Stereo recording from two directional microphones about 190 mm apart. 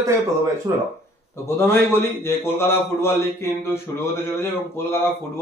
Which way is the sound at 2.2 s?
10° left (ahead or behind).